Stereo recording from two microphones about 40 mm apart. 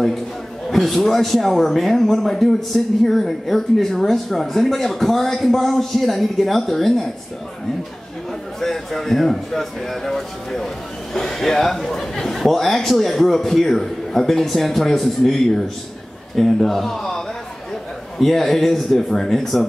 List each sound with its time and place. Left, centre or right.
0.7 s a man's voice: centre
8.5 s a man's voice: centre